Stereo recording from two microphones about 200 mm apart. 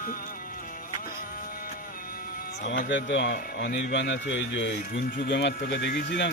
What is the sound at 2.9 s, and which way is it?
Speech, 60° left (ahead or behind).